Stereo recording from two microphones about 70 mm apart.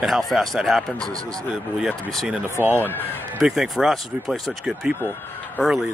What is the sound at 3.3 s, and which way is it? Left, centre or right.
Speech, centre.